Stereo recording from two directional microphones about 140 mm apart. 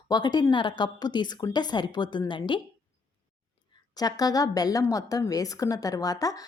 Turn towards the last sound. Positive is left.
turn(degrees=25)  # may be behind; listen again after turning